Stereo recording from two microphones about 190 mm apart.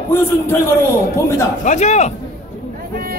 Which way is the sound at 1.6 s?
40° left (ahead or behind).